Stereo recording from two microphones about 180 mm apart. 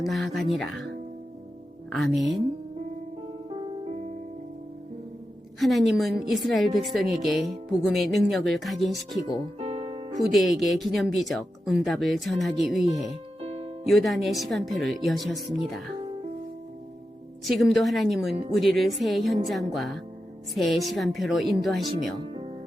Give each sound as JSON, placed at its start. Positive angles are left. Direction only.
{"t": 0.1, "sound": "speech", "side_deg": 0}
{"t": 1.9, "sound": "speech", "side_deg": 0}
{"t": 5.5, "sound": "speech", "side_deg": 0}
{"t": 9.6, "sound": "music", "side_deg": -30}
{"t": 10.2, "sound": "speech", "side_deg": 0}
{"t": 13.4, "sound": "music", "side_deg": -35}
{"t": 13.8, "sound": "speech", "side_deg": 0}
{"t": 17.4, "sound": "speech", "side_deg": 0}
{"t": 22.2, "sound": "music", "side_deg": -30}